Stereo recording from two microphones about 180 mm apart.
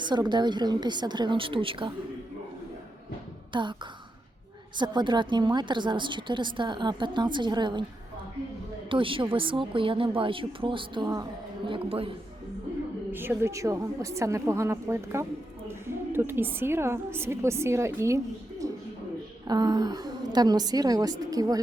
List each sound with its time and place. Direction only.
0.0 s a woman's voice: 25° right (ahead or behind)
3.5 s speech: 25° right (ahead or behind)
4.8 s a woman's voice: 25° right (ahead or behind)
8.9 s a woman's voice: 30° right (ahead or behind)
13.1 s a woman's voice: 10° right (ahead or behind)
18.6 s a sound: 20° right (ahead or behind)
19.5 s a woman's voice: 20° right (ahead or behind)